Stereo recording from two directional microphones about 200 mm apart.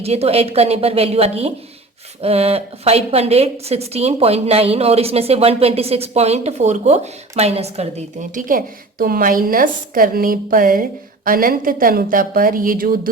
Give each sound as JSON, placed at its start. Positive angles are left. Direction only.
{"t": 0.0, "sound": "a woman's voice", "side_deg": -30}